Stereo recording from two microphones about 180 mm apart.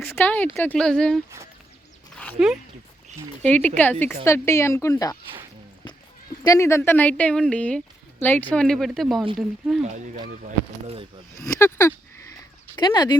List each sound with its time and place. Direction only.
0.1 s a woman's voice: 10° left (ahead or behind)
3.4 s a woman's voice: 10° left (ahead or behind)
6.4 s a woman's voice: 15° left (ahead or behind); by 9.8 s centre (ahead or behind)
11.3 s a woman's voice: 15° left (ahead or behind)